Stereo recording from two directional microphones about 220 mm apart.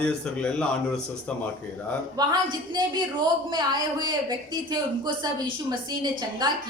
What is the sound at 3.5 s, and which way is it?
Speech, 20° right (ahead or behind).